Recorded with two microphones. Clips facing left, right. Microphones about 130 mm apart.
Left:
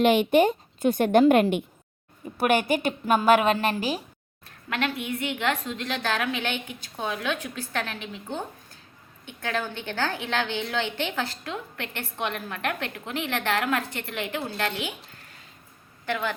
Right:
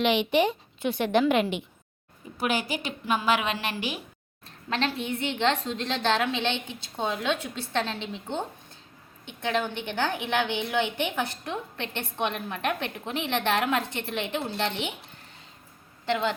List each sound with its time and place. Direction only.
0.0 s a woman's voice: 45° left (ahead or behind)
4.4 s a woman's voice: 30° right (ahead or behind)